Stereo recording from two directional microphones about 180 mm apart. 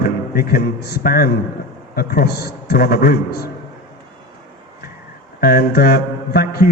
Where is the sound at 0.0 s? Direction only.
55° left (ahead or behind).